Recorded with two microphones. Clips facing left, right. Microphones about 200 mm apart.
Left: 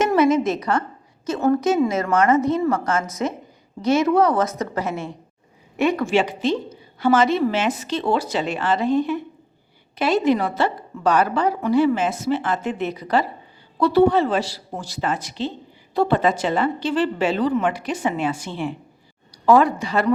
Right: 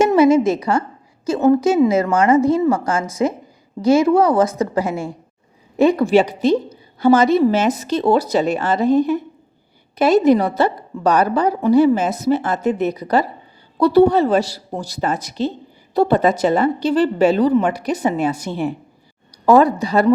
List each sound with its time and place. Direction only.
0.0 s a sound: 30° right (ahead or behind)
0.3 s a woman's voice: 10° right (ahead or behind)
0.6 s a woman's voice: 30° right (ahead or behind)
2.7 s a woman's voice: 10° right (ahead or behind)
3.8 s speech: 30° right (ahead or behind)
4.8 s a woman's voice: 10° right (ahead or behind)
5.7 s a woman's voice: 35° right (ahead or behind)